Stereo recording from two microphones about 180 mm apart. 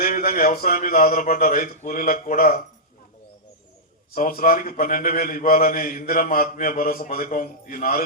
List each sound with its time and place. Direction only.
0.0 s a man's voice: 55° left (ahead or behind)
4.1 s a man's voice: 50° left (ahead or behind)